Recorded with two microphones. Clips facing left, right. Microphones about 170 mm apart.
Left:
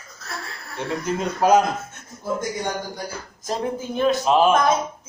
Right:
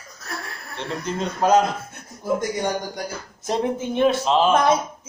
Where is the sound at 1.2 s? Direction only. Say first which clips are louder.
Even; 10° left (ahead or behind).